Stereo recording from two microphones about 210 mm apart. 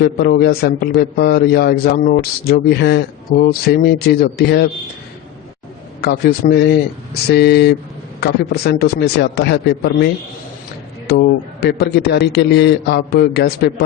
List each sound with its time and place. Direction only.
0.0 s a man's voice: 50° left (ahead or behind)
6.0 s a man's voice: 50° left (ahead or behind)
11.6 s a man's voice: 50° left (ahead or behind)